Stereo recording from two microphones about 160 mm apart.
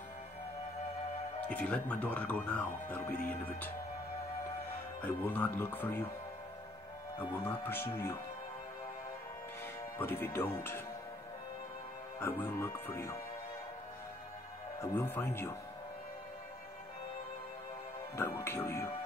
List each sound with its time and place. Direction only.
1.5 s speech: 10° left (ahead or behind)
5.0 s speech: 10° left (ahead or behind)
7.2 s speech: 15° left (ahead or behind)
9.9 s speech: 15° left (ahead or behind)
12.2 s speech: 15° left (ahead or behind)
14.8 s speech: 10° left (ahead or behind)
18.1 s speech: 15° left (ahead or behind)